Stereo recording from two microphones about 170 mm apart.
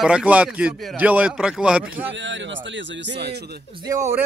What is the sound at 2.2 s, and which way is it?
A man's voice, 90° right.